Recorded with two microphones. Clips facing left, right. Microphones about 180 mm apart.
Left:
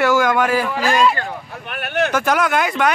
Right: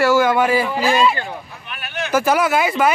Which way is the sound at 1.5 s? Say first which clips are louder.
Left 7 dB; 60° left (ahead or behind).